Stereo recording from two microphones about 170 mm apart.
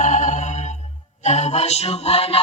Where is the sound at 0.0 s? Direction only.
45° left (ahead or behind).